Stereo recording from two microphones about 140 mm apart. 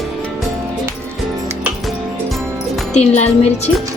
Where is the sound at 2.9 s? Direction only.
55° left (ahead or behind).